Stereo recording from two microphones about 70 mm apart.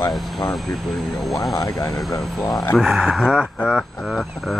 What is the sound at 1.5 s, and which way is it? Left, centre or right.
Speech, left.